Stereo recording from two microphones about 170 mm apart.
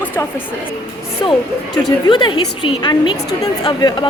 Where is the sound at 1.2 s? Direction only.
30° left (ahead or behind).